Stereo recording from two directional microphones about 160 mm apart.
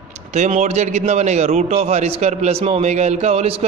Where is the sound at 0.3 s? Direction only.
45° right (ahead or behind).